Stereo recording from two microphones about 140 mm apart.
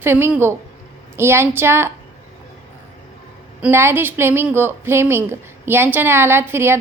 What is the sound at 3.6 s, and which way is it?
A woman's voice, 15° right (ahead or behind).